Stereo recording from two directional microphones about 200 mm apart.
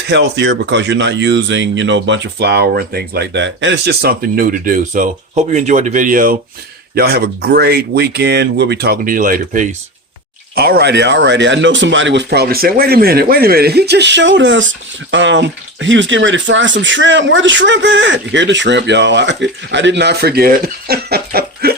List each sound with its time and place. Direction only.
0.1 s speech: 60° right (ahead or behind)